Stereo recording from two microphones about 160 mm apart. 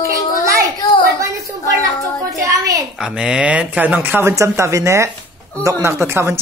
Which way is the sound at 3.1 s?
5° right (ahead or behind).